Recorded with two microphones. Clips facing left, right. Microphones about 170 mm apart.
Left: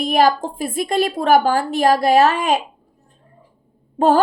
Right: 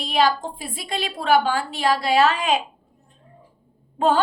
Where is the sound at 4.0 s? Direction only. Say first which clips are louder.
Left 5 dB; 40° left (ahead or behind).